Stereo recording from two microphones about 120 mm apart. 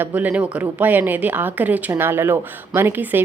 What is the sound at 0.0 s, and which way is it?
Speech, 15° right (ahead or behind).